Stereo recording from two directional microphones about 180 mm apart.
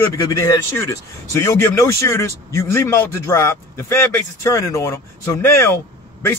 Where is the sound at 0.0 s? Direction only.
20° left (ahead or behind).